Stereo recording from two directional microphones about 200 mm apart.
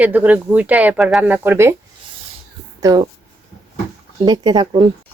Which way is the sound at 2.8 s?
20° right (ahead or behind).